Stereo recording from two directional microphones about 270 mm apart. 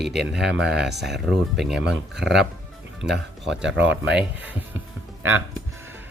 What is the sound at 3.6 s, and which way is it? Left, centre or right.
Speech, right.